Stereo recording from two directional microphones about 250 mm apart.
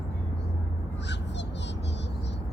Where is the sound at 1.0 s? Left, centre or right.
Left.